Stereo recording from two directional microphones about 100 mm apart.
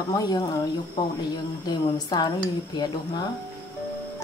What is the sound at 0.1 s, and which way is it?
Speech, 40° left (ahead or behind).